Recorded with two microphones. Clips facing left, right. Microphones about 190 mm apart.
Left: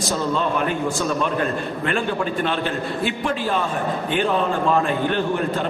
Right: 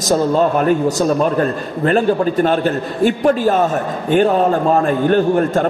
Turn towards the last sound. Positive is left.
turn(degrees=-45)  # may be behind; listen again after turning